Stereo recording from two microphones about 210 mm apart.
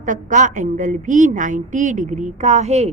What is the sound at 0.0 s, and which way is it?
A woman's voice, 35° right (ahead or behind).